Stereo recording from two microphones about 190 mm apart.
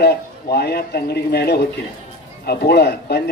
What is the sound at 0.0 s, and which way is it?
A man's voice, 60° left (ahead or behind).